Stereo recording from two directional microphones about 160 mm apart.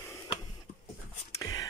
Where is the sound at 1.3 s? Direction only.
20° left (ahead or behind).